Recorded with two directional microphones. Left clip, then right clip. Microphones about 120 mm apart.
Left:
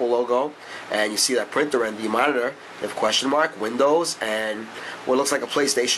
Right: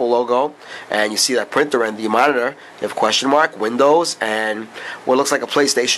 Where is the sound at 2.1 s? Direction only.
35° right (ahead or behind).